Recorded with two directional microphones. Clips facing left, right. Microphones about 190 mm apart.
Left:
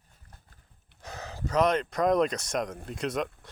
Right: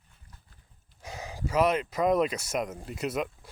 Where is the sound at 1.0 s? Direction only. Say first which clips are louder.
Right 1 dB; 10° right (ahead or behind).